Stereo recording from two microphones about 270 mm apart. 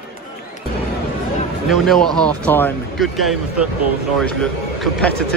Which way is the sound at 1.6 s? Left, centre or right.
Centre.